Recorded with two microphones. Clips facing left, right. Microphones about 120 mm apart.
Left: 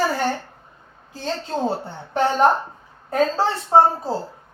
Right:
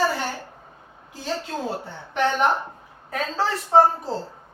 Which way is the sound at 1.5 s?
40° left (ahead or behind).